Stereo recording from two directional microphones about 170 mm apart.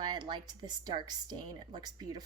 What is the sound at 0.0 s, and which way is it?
A woman's voice, 25° right (ahead or behind).